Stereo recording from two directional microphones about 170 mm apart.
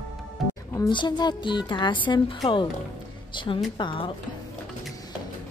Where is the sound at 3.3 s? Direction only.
30° left (ahead or behind).